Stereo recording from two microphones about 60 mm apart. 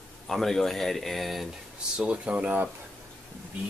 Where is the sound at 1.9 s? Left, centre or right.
Centre.